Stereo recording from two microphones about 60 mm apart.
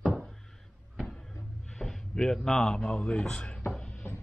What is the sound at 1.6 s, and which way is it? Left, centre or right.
Speech, centre.